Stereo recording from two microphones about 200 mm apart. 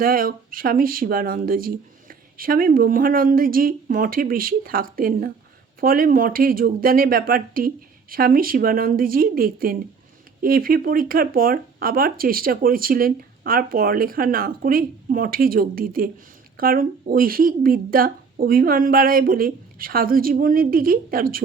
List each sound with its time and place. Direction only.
0.0 s speech: 45° right (ahead or behind)